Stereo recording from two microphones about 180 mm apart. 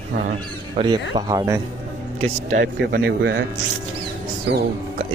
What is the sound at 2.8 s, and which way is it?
Speech, 65° right (ahead or behind).